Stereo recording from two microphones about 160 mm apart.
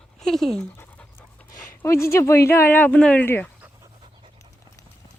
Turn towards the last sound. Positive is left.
turn(degrees=-30)  # may be behind; listen again after turning